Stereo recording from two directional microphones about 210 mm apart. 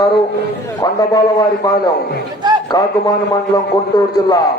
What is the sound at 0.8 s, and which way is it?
A man's voice, 20° left (ahead or behind).